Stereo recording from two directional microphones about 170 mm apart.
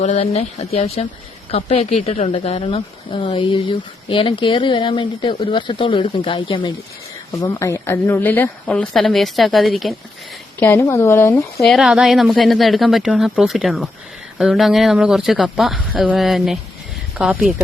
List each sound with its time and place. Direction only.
0.0 s speech: 45° left (ahead or behind); by 6.7 s 30° left (ahead or behind)
7.4 s a woman's voice: 15° left (ahead or behind); by 9.9 s centre (ahead or behind)
10.6 s speech: 15° left (ahead or behind)
11.6 s a woman's voice: centre (ahead or behind)